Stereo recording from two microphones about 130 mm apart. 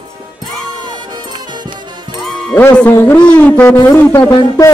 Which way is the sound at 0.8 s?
35° right (ahead or behind).